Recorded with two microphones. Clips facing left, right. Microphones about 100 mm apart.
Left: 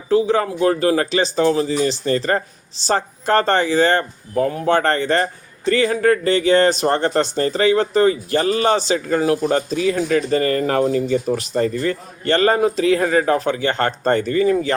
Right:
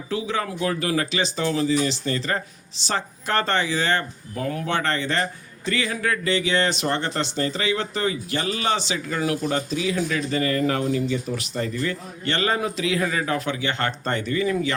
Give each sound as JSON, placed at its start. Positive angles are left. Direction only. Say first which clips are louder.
{"t": 0.1, "sound": "speech", "louder": "left 10 dB", "side_deg": 35}